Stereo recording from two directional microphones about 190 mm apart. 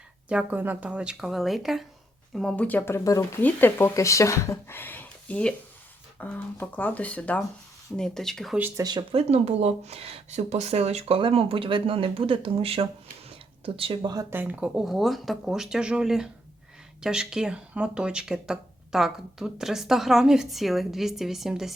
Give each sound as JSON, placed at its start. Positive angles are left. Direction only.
{"t": 0.3, "sound": "speech", "side_deg": -5}
{"t": 9.3, "sound": "speech", "side_deg": -35}
{"t": 14.3, "sound": "speech", "side_deg": -10}